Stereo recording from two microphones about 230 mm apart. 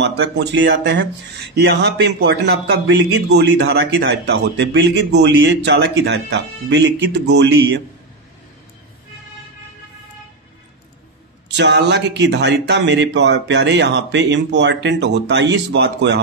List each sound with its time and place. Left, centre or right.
0.0 s speech: right
11.4 s speech: right